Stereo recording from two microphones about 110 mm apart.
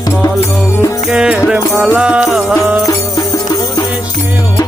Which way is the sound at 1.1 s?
10° right (ahead or behind).